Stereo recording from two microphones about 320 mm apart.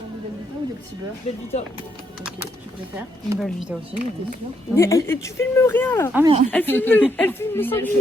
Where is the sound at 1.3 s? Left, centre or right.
Centre.